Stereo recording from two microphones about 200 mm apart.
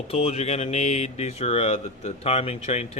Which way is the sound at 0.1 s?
30° left (ahead or behind).